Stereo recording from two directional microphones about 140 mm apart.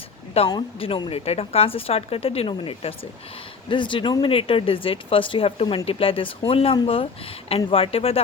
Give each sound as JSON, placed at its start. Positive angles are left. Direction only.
{"t": 0.4, "sound": "speech", "side_deg": 30}